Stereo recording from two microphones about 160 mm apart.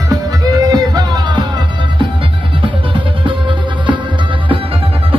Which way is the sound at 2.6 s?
30° right (ahead or behind).